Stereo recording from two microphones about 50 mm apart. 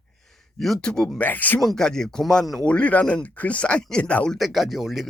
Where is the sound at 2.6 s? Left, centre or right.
Left.